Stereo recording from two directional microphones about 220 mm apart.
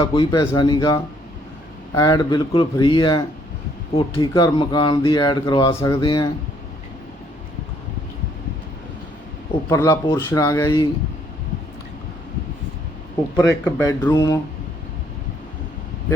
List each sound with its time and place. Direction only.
0.0 s speech: 20° left (ahead or behind)
9.6 s speech: 15° left (ahead or behind)
13.3 s speech: 10° left (ahead or behind)